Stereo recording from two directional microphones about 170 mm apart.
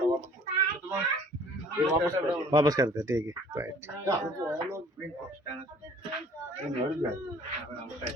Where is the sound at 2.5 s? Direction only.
20° right (ahead or behind).